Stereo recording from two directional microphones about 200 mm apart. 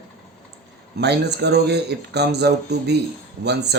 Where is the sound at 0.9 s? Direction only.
55° right (ahead or behind).